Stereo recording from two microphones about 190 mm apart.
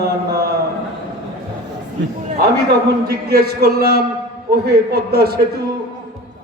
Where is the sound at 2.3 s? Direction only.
55° right (ahead or behind).